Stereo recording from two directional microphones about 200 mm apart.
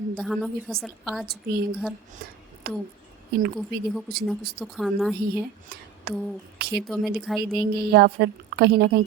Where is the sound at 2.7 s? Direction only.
50° right (ahead or behind).